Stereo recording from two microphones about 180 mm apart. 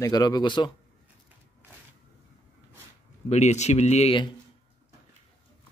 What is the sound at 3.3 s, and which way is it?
Speech, 40° left (ahead or behind).